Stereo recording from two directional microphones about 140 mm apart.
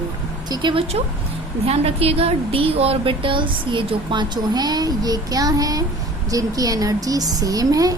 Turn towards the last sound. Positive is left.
turn(degrees=-25)  # may be behind; listen again after turning